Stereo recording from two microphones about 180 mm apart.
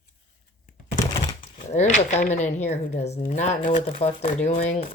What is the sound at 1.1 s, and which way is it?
Typewriter, 25° left (ahead or behind).